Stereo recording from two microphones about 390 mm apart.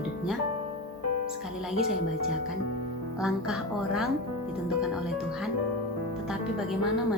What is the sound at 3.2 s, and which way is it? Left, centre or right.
Speech, centre.